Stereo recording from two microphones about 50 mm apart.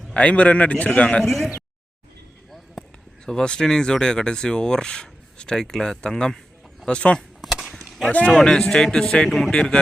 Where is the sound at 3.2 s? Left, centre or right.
Centre.